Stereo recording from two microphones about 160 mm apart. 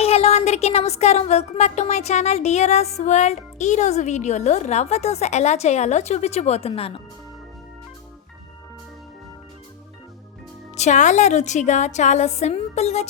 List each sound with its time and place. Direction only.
0.0 s speech: 40° left (ahead or behind)
10.8 s speech: 45° left (ahead or behind)